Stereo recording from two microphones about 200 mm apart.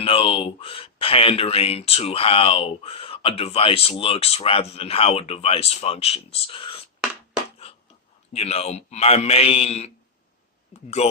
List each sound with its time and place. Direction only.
0.0 s speech: 25° left (ahead or behind)
8.3 s a man's voice: 30° left (ahead or behind)
10.7 s a sound: 35° left (ahead or behind)